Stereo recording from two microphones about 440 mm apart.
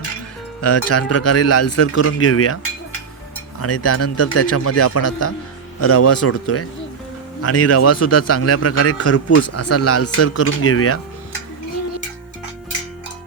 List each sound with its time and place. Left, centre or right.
0.6 s a man's voice: left
3.6 s a man's voice: left